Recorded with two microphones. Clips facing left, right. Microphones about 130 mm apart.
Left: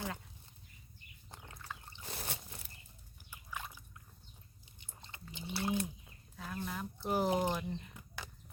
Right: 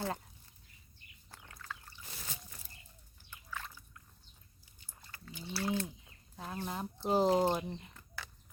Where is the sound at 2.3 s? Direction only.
65° left (ahead or behind).